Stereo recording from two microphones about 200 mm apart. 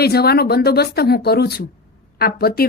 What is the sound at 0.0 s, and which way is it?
Speech, 50° left (ahead or behind).